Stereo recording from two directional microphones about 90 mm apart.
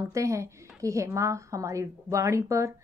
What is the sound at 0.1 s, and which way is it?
Speech, 35° right (ahead or behind).